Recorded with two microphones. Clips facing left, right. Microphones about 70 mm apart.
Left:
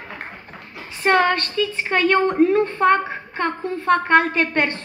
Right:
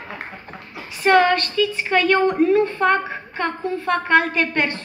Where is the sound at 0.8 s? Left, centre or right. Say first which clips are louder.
Right 2 dB; left.